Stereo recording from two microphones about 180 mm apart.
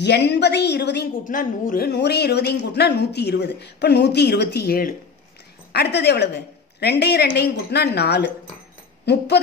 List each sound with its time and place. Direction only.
0.0 s speech: 70° left (ahead or behind)
1.2 s a woman's voice: 50° left (ahead or behind); by 9.4 s 70° left (ahead or behind)